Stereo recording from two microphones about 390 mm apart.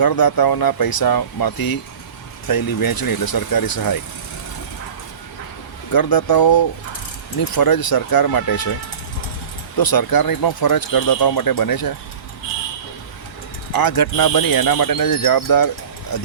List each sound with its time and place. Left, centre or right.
0.0 s speech: left
5.9 s speech: left
9.7 s speech: left
13.7 s speech: left